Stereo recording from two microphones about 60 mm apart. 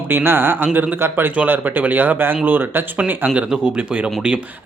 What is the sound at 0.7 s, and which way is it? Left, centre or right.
Speech, right.